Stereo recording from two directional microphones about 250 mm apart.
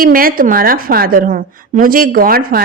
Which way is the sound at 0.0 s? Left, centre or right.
Right.